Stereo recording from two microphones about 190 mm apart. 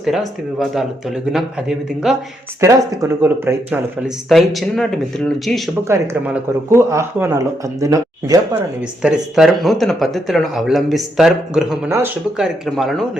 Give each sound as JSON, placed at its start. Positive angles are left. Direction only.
{"t": 0.0, "sound": "speech", "side_deg": 0}
{"t": 2.6, "sound": "speech", "side_deg": -15}
{"t": 5.9, "sound": "speech", "side_deg": -15}
{"t": 9.0, "sound": "speech", "side_deg": -5}
{"t": 11.9, "sound": "speech", "side_deg": -15}
{"t": 12.4, "sound": "speech", "side_deg": 0}